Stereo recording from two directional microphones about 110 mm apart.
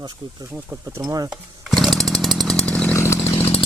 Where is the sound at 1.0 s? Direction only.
35° right (ahead or behind).